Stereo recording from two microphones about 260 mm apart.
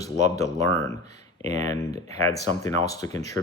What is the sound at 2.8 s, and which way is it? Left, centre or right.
Speech, centre.